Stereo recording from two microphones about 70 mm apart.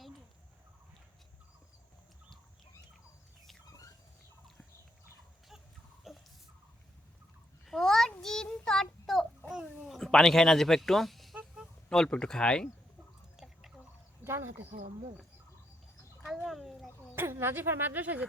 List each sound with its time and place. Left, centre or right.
6.1 s a sound: centre
7.6 s a sound: centre
8.2 s child singing: centre
9.5 s a sound: centre
10.0 s speech: centre
13.3 s drip: centre
14.3 s speech: right
16.2 s a child's voice: centre
17.2 s speech: right